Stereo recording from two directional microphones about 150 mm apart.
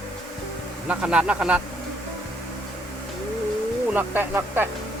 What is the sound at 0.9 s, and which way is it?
Speech, 10° right (ahead or behind).